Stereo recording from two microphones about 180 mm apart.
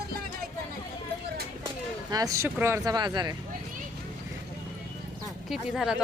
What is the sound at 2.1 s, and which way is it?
Speech, 20° right (ahead or behind).